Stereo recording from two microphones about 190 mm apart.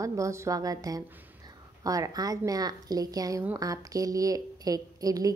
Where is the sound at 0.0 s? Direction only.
15° right (ahead or behind).